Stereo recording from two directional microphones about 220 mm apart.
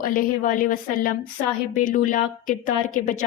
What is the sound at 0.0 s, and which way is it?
A woman's voice, 40° left (ahead or behind).